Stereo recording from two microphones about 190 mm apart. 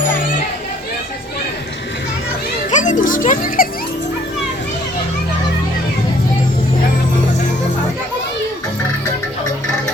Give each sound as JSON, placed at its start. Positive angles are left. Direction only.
{"t": 2.6, "sound": "music", "side_deg": 40}